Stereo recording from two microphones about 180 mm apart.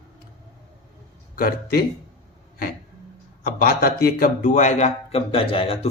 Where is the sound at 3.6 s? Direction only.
55° left (ahead or behind).